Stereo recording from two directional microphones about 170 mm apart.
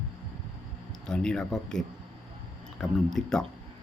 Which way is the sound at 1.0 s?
5° left (ahead or behind).